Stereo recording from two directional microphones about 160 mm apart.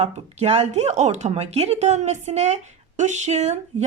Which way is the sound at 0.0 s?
40° right (ahead or behind).